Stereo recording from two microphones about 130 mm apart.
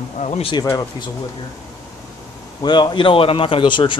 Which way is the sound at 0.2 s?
55° left (ahead or behind).